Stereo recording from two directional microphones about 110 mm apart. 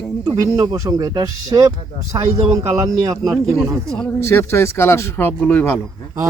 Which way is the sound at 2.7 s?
30° right (ahead or behind).